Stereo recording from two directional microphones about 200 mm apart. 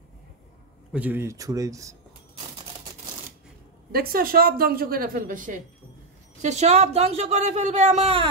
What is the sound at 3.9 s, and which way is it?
A woman's voice, 50° right (ahead or behind).